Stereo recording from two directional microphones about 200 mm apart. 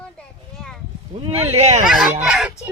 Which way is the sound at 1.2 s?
30° right (ahead or behind).